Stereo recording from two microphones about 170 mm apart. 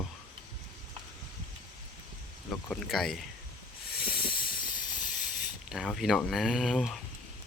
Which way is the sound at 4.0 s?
60° left (ahead or behind).